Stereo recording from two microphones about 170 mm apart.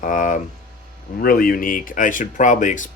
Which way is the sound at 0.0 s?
50° left (ahead or behind).